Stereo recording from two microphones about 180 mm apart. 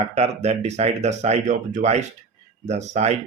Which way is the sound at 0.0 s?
35° right (ahead or behind).